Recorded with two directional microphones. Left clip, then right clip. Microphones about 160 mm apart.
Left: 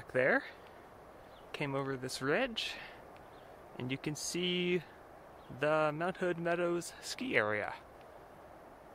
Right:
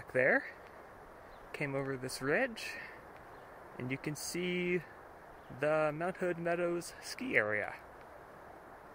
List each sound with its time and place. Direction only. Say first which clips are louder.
0.1 s speech: right 1 dB; 5° left (ahead or behind)
1.6 s speech: even; 10° left (ahead or behind)
3.9 s speech: left 1 dB; 10° left (ahead or behind)